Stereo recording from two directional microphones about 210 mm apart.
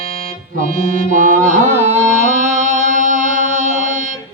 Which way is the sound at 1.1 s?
40° right (ahead or behind).